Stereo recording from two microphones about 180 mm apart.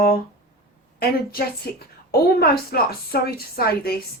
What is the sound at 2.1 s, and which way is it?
Speech, 60° left (ahead or behind).